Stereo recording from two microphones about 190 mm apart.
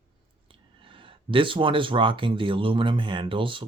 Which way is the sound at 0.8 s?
25° right (ahead or behind).